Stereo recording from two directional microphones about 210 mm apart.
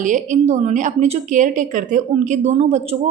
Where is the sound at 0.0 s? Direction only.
35° right (ahead or behind).